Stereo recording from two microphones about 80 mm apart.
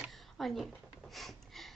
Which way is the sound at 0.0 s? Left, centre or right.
Centre.